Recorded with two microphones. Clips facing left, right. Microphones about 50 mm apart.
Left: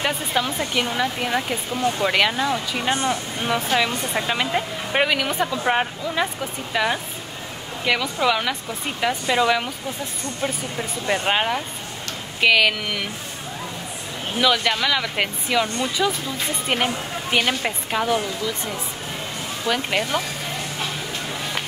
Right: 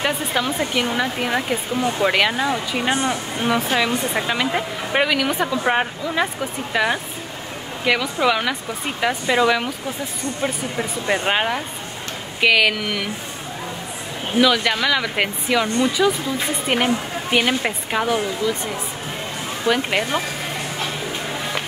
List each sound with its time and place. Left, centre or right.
0.0 s speech: centre
10.4 s speech: centre
14.4 s speech: centre
18.1 s speech: centre